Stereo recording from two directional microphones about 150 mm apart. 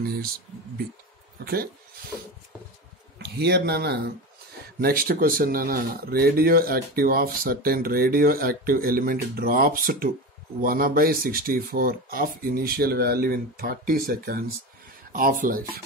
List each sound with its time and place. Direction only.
1.4 s speech: 85° right
3.2 s speech: 90° right
4.7 s speech: 75° right (ahead or behind)
15.1 s speech: 70° right (ahead or behind)